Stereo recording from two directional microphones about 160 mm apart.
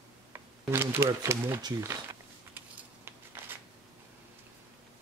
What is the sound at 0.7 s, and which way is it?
Speech, 15° right (ahead or behind).